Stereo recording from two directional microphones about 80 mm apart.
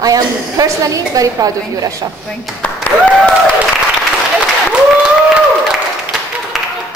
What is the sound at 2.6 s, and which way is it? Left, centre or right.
Speech, left.